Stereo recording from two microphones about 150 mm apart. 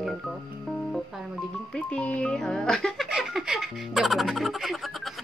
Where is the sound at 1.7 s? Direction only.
10° left (ahead or behind).